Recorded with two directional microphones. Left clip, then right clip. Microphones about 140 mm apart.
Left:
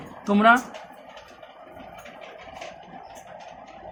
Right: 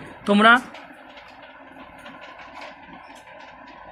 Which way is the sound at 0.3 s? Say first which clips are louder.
Right 3 dB; 30° right (ahead or behind).